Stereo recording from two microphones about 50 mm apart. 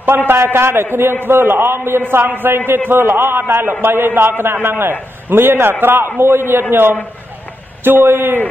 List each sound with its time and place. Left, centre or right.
0.3 s a man's voice: right